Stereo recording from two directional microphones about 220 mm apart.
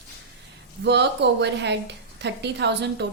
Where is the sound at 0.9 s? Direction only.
50° right (ahead or behind).